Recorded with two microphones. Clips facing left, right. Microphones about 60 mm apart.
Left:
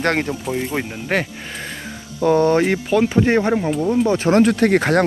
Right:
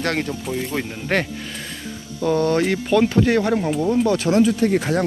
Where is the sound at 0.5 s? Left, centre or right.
Centre.